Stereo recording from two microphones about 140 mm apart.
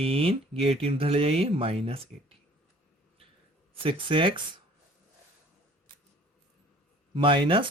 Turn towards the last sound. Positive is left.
turn(degrees=-40)  # may be behind; listen again after turning